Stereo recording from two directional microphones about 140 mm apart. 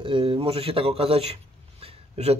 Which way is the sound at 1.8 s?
50° right (ahead or behind).